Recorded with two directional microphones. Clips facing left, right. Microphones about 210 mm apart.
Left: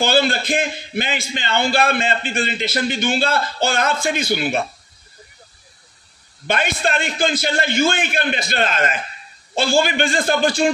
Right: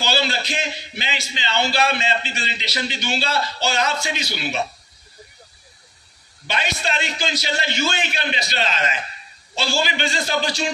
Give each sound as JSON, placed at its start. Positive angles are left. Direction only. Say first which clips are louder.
{"t": 0.0, "sound": "a man's voice", "louder": "left 6 dB", "side_deg": 50}
{"t": 6.4, "sound": "a man's voice", "louder": "left 5 dB", "side_deg": 50}